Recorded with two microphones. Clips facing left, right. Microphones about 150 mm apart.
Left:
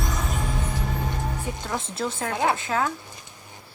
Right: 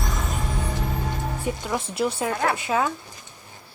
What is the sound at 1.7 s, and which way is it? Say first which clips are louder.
Speech: right 3 dB; 15° right (ahead or behind).